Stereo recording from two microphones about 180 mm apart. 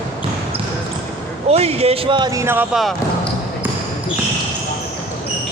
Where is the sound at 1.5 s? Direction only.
35° right (ahead or behind); by 2.6 s 15° right (ahead or behind).